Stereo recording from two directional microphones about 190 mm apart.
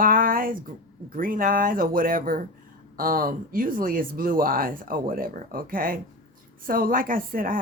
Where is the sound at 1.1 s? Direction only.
45° right (ahead or behind).